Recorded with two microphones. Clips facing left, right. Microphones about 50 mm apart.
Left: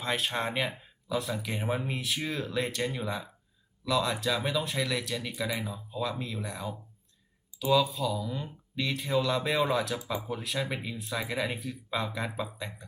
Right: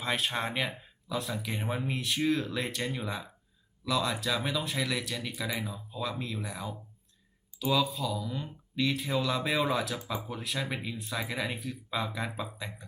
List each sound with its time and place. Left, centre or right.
0.0 s speech: centre